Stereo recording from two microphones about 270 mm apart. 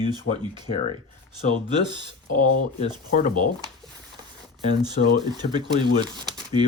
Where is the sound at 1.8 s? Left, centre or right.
Centre.